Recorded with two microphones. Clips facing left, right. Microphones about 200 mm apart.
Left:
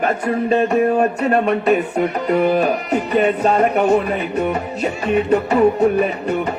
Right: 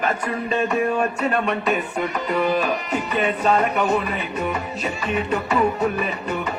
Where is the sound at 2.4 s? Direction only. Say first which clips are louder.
Left 5 dB; 60° left (ahead or behind).